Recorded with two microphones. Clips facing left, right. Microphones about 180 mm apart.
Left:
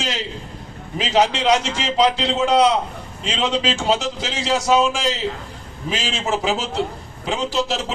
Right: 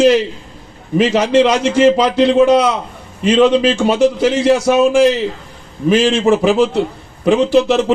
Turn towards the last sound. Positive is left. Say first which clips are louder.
# right 11 dB
turn(degrees=-60)  # may be behind; listen again after turning